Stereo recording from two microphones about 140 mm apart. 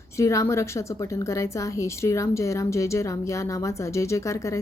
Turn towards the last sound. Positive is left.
turn(degrees=20)  # may be behind; listen again after turning